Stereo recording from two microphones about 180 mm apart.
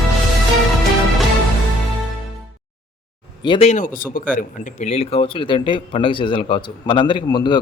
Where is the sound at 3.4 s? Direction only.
25° left (ahead or behind).